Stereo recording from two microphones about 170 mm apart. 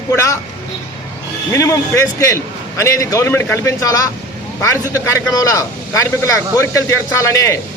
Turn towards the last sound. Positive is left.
turn(degrees=20)  # may be behind; listen again after turning